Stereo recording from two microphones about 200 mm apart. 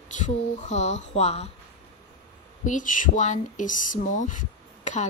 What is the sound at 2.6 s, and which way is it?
Speech, 40° left (ahead or behind).